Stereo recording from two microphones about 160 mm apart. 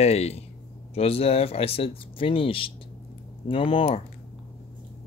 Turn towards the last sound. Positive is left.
turn(degrees=35)  # may be behind; listen again after turning